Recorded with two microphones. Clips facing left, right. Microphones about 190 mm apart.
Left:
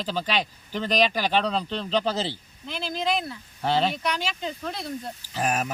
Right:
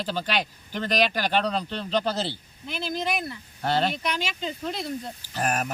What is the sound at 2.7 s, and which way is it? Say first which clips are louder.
Speech: right 1 dB; 15° right (ahead or behind).